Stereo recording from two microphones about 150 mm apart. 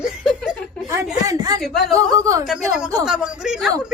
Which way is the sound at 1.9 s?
20° right (ahead or behind).